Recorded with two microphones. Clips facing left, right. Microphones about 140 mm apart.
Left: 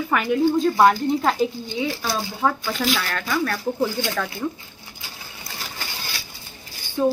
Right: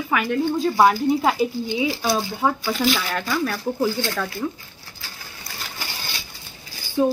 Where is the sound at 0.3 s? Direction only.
5° left (ahead or behind).